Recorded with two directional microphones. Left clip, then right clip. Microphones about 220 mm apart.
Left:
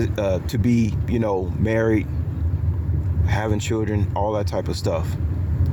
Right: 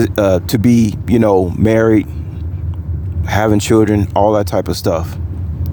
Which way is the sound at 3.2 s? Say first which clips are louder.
Right 12 dB; 35° right (ahead or behind).